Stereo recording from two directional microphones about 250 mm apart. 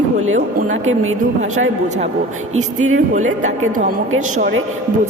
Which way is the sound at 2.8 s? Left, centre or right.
Right.